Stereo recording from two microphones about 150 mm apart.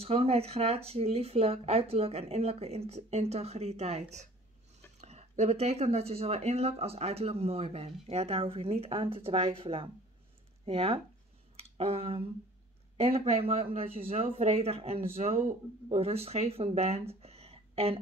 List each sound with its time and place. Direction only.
0.0 s speech: 40° right (ahead or behind)
5.0 s speech: 45° right (ahead or behind)
11.5 s a sound: 40° right (ahead or behind)
12.9 s speech: 40° right (ahead or behind)